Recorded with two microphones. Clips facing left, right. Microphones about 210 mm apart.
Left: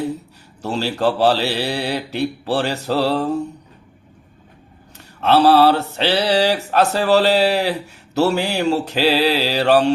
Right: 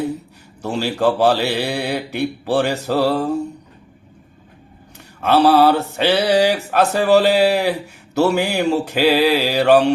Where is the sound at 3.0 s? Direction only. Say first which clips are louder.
Right 2 dB; 45° right (ahead or behind).